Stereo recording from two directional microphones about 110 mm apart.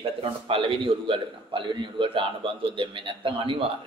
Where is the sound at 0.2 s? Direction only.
55° right (ahead or behind).